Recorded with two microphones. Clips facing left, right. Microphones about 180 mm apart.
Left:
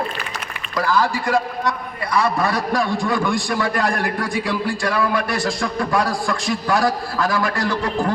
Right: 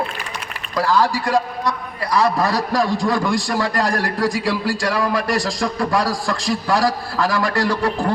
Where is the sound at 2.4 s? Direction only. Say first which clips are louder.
Right 1 dB; 35° right (ahead or behind).